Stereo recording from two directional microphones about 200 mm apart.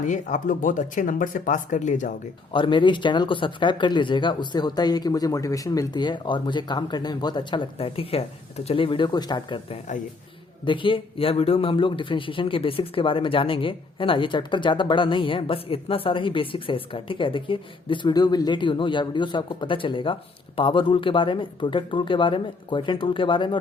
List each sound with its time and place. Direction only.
0.0 s speech: 40° left (ahead or behind)
2.5 s speech: 25° left (ahead or behind)